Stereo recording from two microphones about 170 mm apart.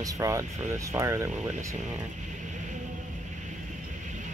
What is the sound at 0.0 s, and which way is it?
Speech, 20° right (ahead or behind).